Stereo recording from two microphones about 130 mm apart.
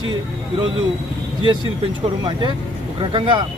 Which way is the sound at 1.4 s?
40° right (ahead or behind).